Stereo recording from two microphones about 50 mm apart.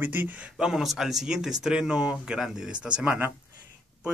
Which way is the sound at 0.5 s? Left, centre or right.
Centre.